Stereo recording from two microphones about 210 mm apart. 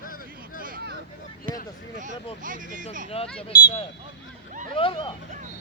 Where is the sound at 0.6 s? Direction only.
45° right (ahead or behind).